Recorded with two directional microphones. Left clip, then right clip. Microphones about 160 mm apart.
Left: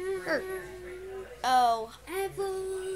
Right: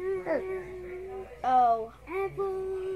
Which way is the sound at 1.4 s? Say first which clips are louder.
Right 1 dB; 15° left (ahead or behind).